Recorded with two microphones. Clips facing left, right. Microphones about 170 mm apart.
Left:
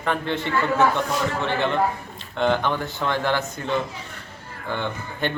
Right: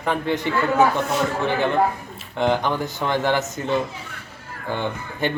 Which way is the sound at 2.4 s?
15° right (ahead or behind).